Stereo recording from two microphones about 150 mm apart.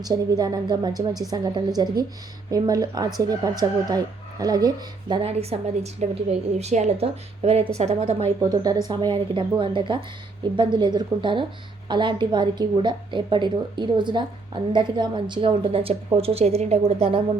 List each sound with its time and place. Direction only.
0.0 s speech: 25° right (ahead or behind)
5.3 s a woman's voice: 45° right (ahead or behind)
8.4 s a woman's voice: 25° right (ahead or behind); by 17.2 s 45° right (ahead or behind)